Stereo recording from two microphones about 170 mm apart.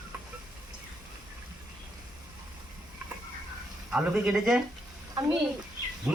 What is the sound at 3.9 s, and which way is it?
Speech, 5° right (ahead or behind).